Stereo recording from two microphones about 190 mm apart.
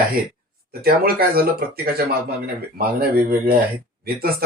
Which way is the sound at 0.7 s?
55° right (ahead or behind).